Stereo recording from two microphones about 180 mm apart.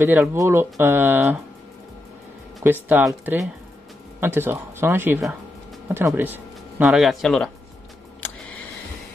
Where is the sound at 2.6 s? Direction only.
10° right (ahead or behind).